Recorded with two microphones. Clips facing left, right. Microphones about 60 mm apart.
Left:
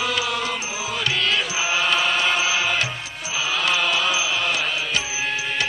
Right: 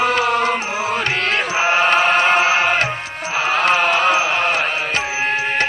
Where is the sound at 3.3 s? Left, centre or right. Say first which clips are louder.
Right 7 dB; right.